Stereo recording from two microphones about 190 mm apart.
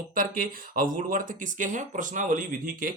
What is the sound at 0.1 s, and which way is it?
Speech, 45° right (ahead or behind).